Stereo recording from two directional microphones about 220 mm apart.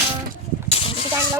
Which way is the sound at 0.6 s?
25° left (ahead or behind).